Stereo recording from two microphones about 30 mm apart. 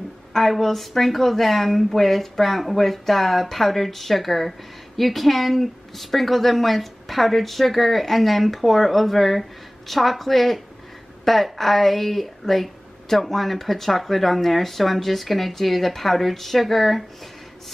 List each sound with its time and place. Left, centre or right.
0.3 s speech: centre